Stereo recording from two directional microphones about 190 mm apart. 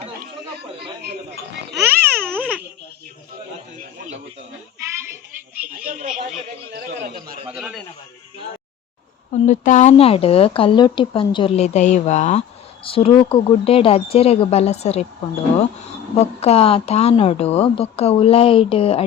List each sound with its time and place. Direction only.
0.5 s chatter: 55° right (ahead or behind)
1.7 s babbling: 10° right (ahead or behind)
5.7 s a sound: 45° right (ahead or behind)
7.4 s a sound: centre (ahead or behind)
9.5 s speech: 40° left (ahead or behind)
16.2 s speech: 35° left (ahead or behind)